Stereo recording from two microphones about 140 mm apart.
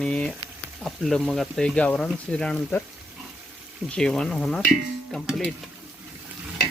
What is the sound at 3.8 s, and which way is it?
Speech, 5° left (ahead or behind).